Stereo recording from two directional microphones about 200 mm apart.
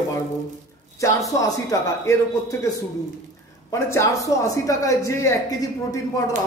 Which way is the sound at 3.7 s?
15° left (ahead or behind).